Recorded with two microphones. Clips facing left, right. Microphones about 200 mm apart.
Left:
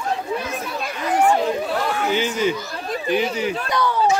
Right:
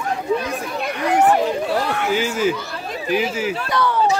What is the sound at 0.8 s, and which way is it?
Speech, 60° right (ahead or behind).